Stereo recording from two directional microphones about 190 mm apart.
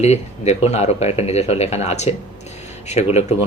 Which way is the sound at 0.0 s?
35° left (ahead or behind).